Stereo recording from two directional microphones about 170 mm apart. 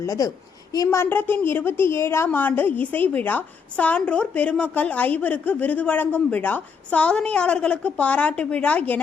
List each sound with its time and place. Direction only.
0.0 s a woman's voice: 20° left (ahead or behind)